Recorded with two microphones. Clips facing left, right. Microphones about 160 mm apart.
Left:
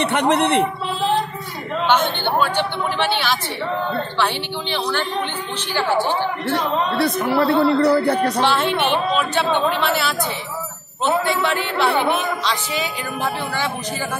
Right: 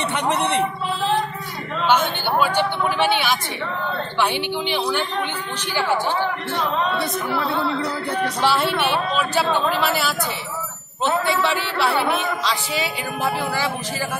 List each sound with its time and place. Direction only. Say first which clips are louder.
0.1 s a man's voice: left 4 dB; 65° left (ahead or behind)
1.9 s speech: even; 10° right (ahead or behind)
7.0 s speech: left 6 dB; 70° left (ahead or behind)
8.5 s a man's voice: left 1 dB; 10° right (ahead or behind)